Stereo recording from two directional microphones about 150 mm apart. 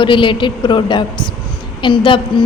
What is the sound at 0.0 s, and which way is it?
A woman's voice, 35° left (ahead or behind).